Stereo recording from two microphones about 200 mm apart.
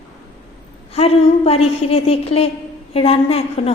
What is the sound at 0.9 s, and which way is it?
A woman's voice, 30° left (ahead or behind).